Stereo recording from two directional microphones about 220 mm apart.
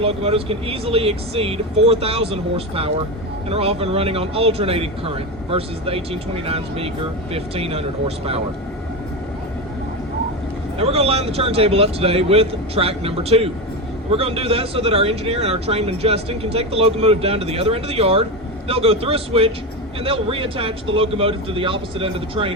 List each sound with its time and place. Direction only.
0.0 s speech: 25° right (ahead or behind)
10.8 s speech: 25° right (ahead or behind)